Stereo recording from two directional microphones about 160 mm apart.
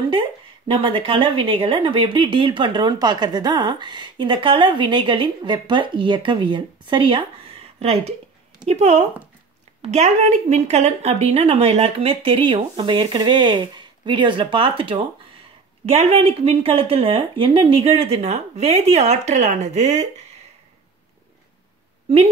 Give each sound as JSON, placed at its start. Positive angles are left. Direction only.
{"t": 0.7, "sound": "speech", "side_deg": -35}